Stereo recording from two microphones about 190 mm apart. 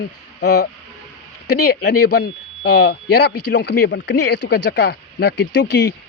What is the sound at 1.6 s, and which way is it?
Speech, 60° left (ahead or behind).